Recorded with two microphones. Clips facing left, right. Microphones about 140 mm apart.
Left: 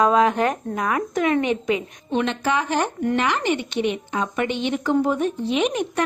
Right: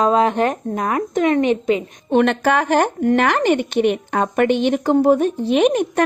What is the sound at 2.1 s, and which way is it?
A woman's voice, 60° right (ahead or behind).